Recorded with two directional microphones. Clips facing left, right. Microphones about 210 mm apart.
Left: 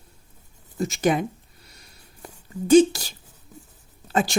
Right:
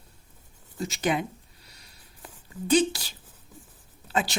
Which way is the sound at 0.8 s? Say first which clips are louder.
Left 5 dB; 45° left (ahead or behind).